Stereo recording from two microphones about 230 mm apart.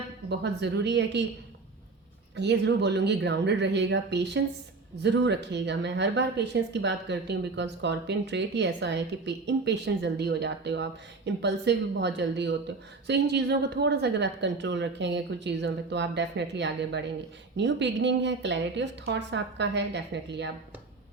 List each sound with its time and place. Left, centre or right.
0.3 s speech: right
2.3 s speech: right